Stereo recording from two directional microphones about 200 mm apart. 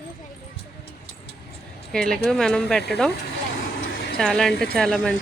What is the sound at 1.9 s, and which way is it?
Speech, 5° left (ahead or behind).